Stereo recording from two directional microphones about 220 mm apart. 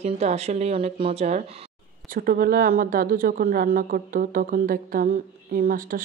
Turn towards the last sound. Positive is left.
turn(degrees=-40)  # may be behind; listen again after turning